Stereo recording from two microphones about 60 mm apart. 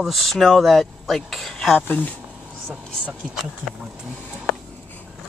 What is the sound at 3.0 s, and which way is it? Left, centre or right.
Speech, right.